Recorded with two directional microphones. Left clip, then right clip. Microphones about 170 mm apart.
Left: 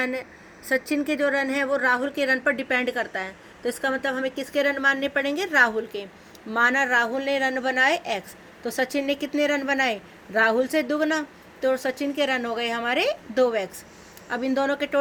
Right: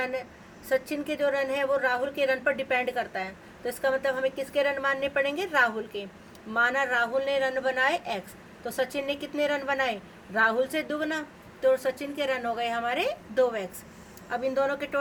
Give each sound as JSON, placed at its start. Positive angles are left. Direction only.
{"t": 0.7, "sound": "a woman's voice", "side_deg": 55}